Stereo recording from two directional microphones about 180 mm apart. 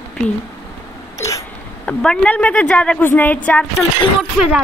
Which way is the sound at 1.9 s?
5° left (ahead or behind).